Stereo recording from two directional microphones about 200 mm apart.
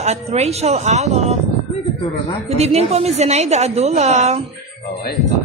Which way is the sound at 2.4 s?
30° right (ahead or behind).